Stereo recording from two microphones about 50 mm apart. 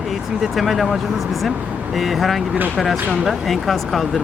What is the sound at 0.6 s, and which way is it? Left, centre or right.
Speech, centre.